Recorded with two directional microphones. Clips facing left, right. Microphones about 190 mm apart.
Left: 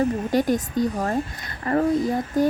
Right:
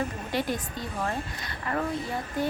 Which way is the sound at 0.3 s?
45° left (ahead or behind).